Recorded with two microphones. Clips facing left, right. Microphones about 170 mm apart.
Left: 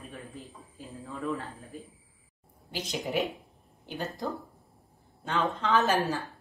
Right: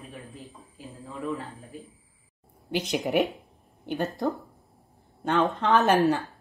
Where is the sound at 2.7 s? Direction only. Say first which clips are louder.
Right 7 dB; 60° right (ahead or behind).